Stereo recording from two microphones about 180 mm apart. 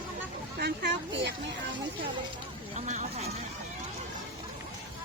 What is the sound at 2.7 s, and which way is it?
Speech, 40° right (ahead or behind).